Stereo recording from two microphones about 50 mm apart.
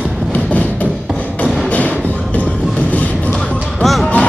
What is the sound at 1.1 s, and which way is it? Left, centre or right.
Music, left.